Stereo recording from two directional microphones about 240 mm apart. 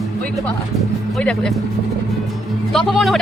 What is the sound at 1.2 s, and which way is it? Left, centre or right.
Speech, centre.